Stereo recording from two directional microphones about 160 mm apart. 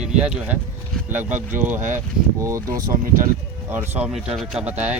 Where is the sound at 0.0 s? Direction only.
5° right (ahead or behind).